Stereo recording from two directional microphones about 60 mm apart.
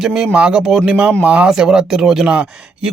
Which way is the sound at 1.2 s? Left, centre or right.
Right.